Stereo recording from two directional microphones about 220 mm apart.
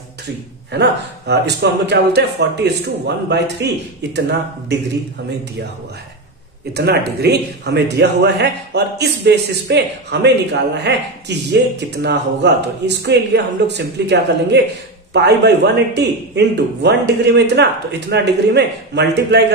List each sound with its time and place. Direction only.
0.7 s a man's voice: 50° right (ahead or behind)
6.7 s a man's voice: 45° right (ahead or behind)